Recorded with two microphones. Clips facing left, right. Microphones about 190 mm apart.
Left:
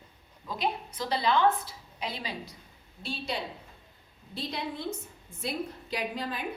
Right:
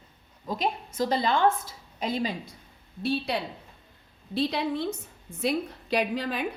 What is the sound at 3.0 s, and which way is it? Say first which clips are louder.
Speech: right 8 dB; 60° right (ahead or behind).